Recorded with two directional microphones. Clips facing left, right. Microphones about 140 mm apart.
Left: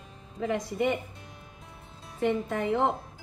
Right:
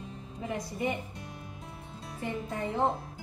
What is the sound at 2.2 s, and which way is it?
Speech, 90° left.